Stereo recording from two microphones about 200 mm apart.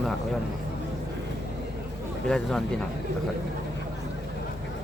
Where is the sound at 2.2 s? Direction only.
5° left (ahead or behind).